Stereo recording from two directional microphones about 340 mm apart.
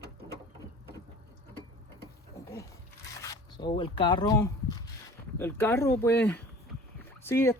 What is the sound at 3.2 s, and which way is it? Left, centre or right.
Speech, centre.